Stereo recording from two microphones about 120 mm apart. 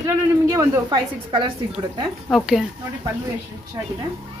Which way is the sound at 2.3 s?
Centre (ahead or behind).